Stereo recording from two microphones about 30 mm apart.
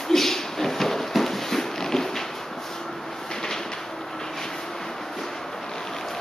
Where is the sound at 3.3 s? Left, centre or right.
Left.